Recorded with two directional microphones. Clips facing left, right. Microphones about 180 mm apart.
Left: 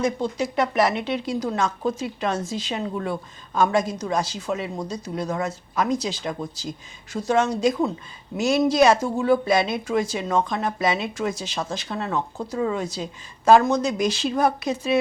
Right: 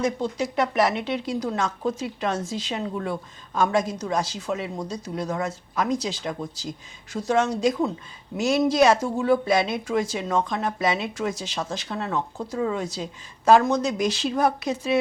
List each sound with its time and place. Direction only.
0.0 s speech: 10° left (ahead or behind)
2.8 s a woman's voice: 20° left (ahead or behind)
9.0 s speech: 20° left (ahead or behind)
13.8 s speech: 10° left (ahead or behind)